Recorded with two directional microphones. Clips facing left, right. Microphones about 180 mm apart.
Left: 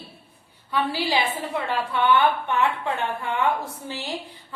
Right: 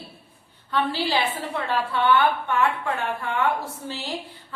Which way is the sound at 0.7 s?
10° left (ahead or behind).